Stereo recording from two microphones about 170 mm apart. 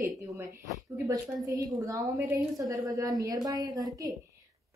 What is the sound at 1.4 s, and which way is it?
A woman's voice, 20° right (ahead or behind).